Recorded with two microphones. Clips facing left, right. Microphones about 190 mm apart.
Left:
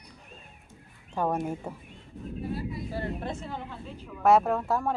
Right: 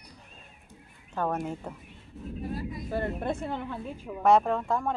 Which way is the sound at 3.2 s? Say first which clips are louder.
Right 4 dB; 55° right (ahead or behind).